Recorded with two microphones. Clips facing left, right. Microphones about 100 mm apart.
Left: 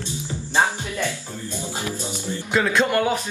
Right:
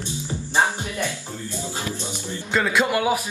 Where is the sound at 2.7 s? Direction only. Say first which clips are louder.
Right 1 dB; 10° right (ahead or behind).